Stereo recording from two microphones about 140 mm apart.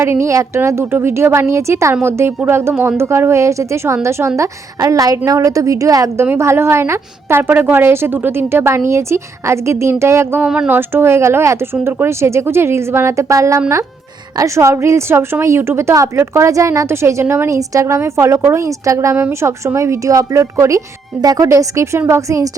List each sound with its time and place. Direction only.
0.0 s a woman's voice: 20° right (ahead or behind)